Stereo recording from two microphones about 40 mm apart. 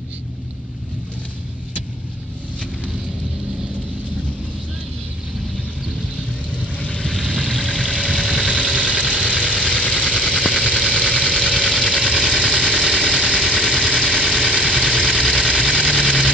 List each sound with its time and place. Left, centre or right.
6.5 s vehicle: left
7.5 s vehicle: centre
7.9 s vehicle: centre
8.4 s vehicle: left